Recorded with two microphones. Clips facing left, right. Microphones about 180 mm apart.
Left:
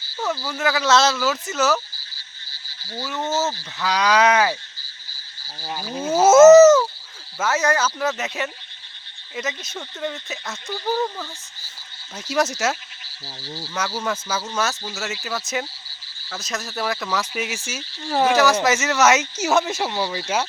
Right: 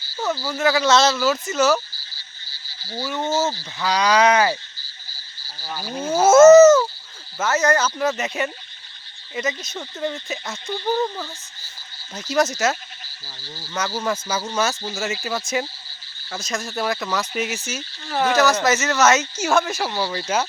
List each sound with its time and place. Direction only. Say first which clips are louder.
0.2 s speech: right 2 dB; 5° right (ahead or behind)
1.1 s speech: right 2 dB; 10° right (ahead or behind)
1.5 s speech: right 3 dB; 5° left (ahead or behind)
3.2 s speech: right 1 dB; 10° right (ahead or behind)
3.8 s speech: right 1 dB; 5° left (ahead or behind)
6.0 s speech: even; 5° left (ahead or behind)
12.1 s speech: right 2 dB; 5° left (ahead or behind)
13.2 s speech: left 6 dB; 30° left (ahead or behind)
13.7 s speech: right 2 dB; 5° left (ahead or behind)